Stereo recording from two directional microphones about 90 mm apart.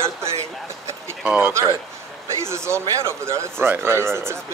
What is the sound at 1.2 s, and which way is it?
Speech, 20° right (ahead or behind).